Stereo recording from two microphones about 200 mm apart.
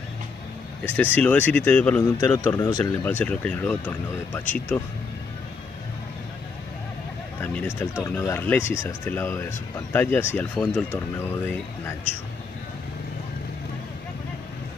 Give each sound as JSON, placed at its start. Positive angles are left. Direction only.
{"t": 0.8, "sound": "speech", "side_deg": 10}
{"t": 2.1, "sound": "speech", "side_deg": 15}
{"t": 7.4, "sound": "speech", "side_deg": 10}